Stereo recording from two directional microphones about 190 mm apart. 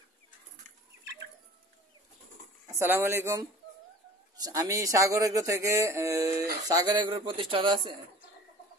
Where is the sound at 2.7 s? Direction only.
15° right (ahead or behind).